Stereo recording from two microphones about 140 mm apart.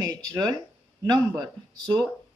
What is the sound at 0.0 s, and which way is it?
Speech, 25° right (ahead or behind).